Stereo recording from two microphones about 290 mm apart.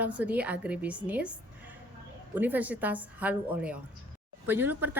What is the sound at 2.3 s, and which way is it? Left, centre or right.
A woman's voice, centre.